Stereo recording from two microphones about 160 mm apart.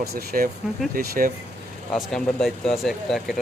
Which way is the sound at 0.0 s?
80° right.